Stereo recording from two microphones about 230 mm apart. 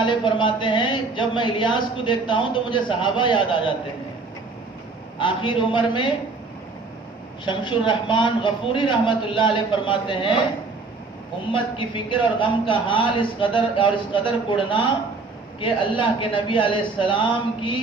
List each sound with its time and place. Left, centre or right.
0.0 s speech: left
5.2 s speech: left
7.4 s speech: left
11.5 s speech: left